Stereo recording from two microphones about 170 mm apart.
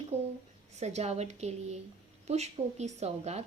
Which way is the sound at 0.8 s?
40° right (ahead or behind).